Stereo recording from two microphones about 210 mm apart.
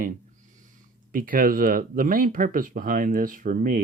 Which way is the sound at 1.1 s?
40° right (ahead or behind).